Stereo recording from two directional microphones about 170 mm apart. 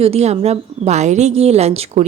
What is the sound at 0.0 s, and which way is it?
A woman's voice, 40° right (ahead or behind).